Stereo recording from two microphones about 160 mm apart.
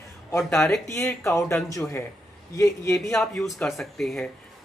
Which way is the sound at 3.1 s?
Centre (ahead or behind).